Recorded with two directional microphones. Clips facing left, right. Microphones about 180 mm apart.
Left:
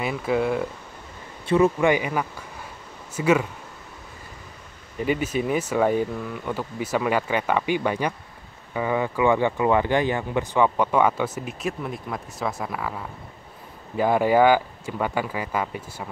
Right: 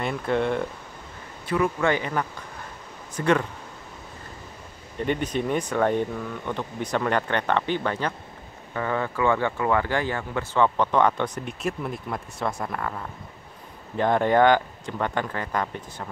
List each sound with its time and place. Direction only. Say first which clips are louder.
0.0 s speech: left 1 dB; 5° left (ahead or behind)
1.5 s speech: left 5 dB; 25° left (ahead or behind)
1.9 s speech: left 3 dB; 10° left (ahead or behind)
4.9 s speech: left 2 dB; 5° left (ahead or behind)